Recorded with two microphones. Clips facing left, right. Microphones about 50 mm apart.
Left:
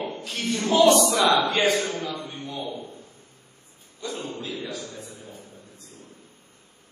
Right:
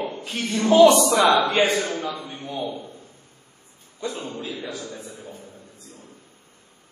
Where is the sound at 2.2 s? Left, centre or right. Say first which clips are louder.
Right 1 dB; centre.